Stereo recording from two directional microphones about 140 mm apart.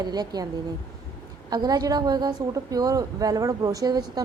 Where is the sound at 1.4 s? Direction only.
30° right (ahead or behind).